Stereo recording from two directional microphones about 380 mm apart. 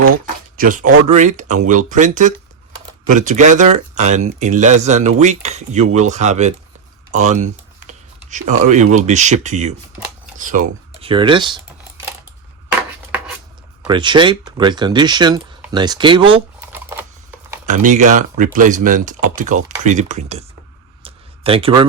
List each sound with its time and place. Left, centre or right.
0.5 s speech: right
7.1 s typing: centre
8.3 s speech: centre
13.8 s speech: centre
17.7 s speech: centre
21.0 s a sound: centre